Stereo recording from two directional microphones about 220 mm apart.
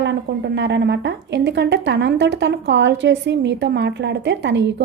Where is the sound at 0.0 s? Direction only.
50° right (ahead or behind).